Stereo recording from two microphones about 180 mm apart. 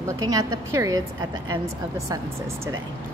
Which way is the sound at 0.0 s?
20° right (ahead or behind).